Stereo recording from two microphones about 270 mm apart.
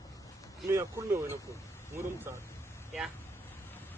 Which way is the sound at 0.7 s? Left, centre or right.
Centre.